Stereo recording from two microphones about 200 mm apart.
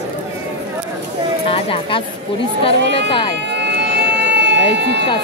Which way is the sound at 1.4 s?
30° left (ahead or behind).